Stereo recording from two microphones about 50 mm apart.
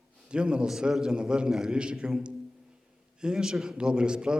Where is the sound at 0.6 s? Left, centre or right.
Centre.